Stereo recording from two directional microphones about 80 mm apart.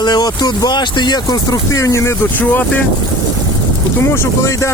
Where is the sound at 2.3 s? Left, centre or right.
Left.